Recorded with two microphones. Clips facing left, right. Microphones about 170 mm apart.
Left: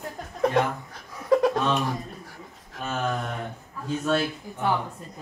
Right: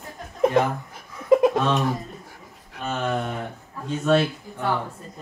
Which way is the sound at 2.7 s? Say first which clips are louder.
Right 2 dB; centre (ahead or behind).